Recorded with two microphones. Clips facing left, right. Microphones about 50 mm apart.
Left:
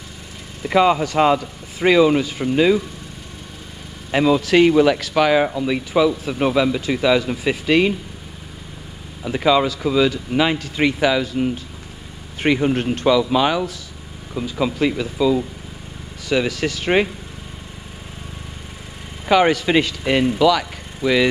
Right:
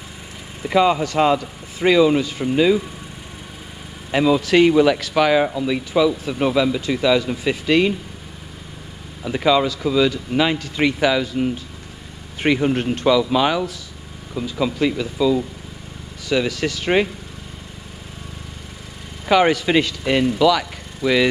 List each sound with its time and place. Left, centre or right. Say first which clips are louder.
0.7 s speech: left 1 dB; centre
4.1 s speech: even; centre
5.4 s speech: even; centre
9.2 s speech: left 1 dB; centre
14.3 s speech: even; centre
19.2 s speech: even; centre
20.0 s speech: even; centre